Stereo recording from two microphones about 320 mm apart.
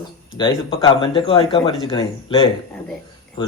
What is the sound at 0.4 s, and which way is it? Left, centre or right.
Speech, centre.